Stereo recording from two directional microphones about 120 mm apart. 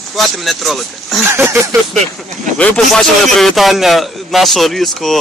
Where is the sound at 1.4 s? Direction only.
20° right (ahead or behind).